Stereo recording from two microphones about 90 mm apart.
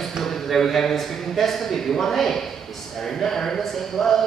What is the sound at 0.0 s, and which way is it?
A woman's voice, 5° left (ahead or behind).